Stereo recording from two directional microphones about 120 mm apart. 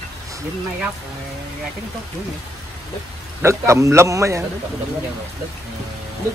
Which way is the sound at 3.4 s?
25° right (ahead or behind).